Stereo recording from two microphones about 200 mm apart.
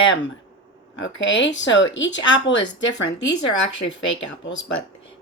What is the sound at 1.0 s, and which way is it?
A woman's voice, 65° left (ahead or behind).